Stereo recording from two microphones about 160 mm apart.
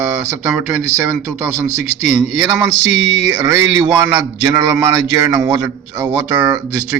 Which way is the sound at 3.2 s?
20° right (ahead or behind).